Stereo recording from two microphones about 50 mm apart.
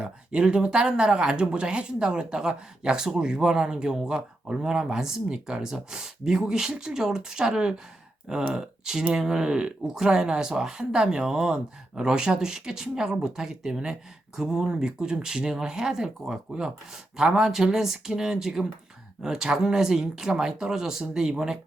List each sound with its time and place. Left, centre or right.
0.0 s speech: centre